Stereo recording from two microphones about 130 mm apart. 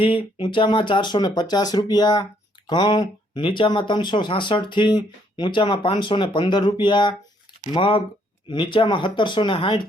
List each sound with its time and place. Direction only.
0.3 s speech: 40° left (ahead or behind)